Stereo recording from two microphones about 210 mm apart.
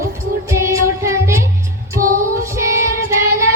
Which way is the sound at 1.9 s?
40° right (ahead or behind).